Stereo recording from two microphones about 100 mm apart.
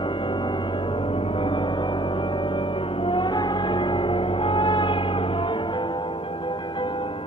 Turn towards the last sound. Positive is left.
turn(degrees=55)  # may be behind; listen again after turning